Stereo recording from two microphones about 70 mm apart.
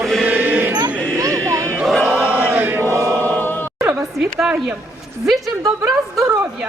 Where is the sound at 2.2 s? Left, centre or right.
Right.